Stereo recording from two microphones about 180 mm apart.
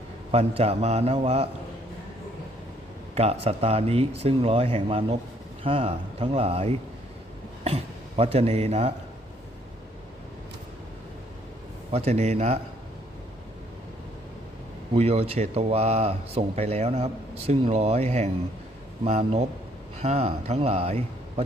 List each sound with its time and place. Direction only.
0.3 s speech: 35° right (ahead or behind)
3.2 s a man's voice: 35° right (ahead or behind)
11.9 s speech: 35° right (ahead or behind)
14.9 s speech: 35° right (ahead or behind)